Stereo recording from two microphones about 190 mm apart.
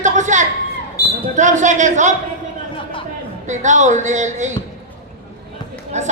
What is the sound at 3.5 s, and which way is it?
A man's voice, 40° right (ahead or behind).